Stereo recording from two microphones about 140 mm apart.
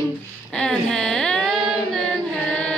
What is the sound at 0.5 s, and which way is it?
Speech, 5° left (ahead or behind).